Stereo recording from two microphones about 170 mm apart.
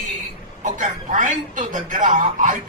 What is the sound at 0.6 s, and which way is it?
A man's voice, 50° right (ahead or behind).